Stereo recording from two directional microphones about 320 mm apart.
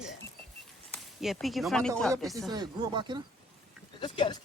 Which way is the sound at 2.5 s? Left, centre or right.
Centre.